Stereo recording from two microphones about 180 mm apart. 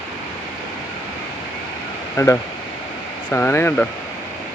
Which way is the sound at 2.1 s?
15° left (ahead or behind).